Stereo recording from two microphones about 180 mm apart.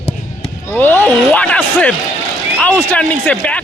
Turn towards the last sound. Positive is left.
turn(degrees=5)  # may be behind; listen again after turning